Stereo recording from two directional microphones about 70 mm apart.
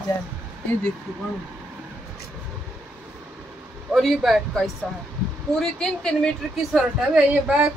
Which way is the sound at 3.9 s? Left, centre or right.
Centre.